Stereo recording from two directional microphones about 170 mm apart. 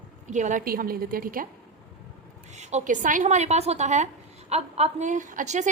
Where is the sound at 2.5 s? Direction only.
45° right (ahead or behind).